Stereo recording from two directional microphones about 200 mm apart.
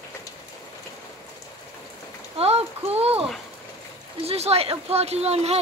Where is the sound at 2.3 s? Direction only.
30° right (ahead or behind).